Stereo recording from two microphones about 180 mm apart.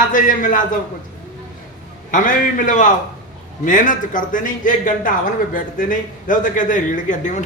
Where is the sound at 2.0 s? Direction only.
45° left (ahead or behind).